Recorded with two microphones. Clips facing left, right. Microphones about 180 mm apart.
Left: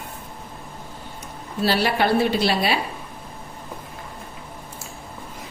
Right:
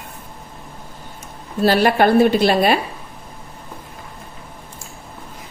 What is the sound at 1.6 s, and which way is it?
A woman's voice, 50° right (ahead or behind).